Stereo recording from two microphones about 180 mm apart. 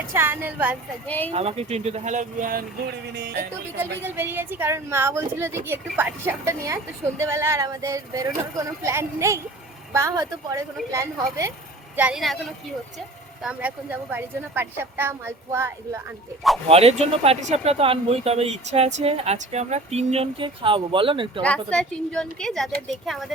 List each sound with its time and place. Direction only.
0.1 s speech: 10° right (ahead or behind)
1.0 s speech: 10° left (ahead or behind)
1.3 s speech: 35° right (ahead or behind); by 3.5 s 65° right (ahead or behind)
3.8 s speech: 10° right (ahead or behind)
11.9 s a woman's voice: 5° right (ahead or behind)
13.4 s speech: 5° right (ahead or behind)
16.6 s speech: 35° right (ahead or behind)
21.4 s a woman's voice: 5° left (ahead or behind)